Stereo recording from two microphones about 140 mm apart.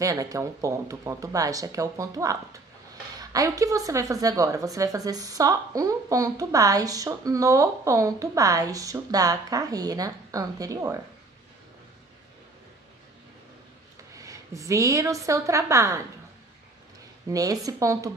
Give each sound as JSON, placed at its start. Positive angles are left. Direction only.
{"t": 0.0, "sound": "a woman's voice", "side_deg": -25}
{"t": 14.1, "sound": "a woman's voice", "side_deg": -25}
{"t": 17.3, "sound": "a woman's voice", "side_deg": -25}